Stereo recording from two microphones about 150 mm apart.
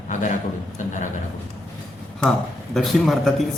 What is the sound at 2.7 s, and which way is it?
Speech, centre (ahead or behind).